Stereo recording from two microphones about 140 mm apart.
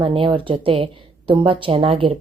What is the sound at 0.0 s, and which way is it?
Speech, 40° right (ahead or behind).